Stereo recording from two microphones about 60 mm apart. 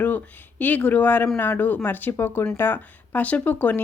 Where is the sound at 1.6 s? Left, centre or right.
Left.